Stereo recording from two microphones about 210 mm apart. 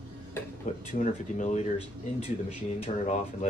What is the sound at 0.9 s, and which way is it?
Speech, 35° left (ahead or behind).